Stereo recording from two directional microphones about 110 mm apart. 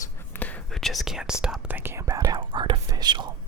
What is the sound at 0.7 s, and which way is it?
Speech, 5° left (ahead or behind).